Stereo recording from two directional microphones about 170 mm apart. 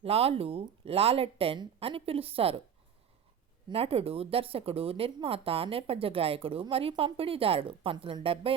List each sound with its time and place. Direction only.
0.0 s speech: 35° right (ahead or behind)
3.7 s speech: 35° right (ahead or behind)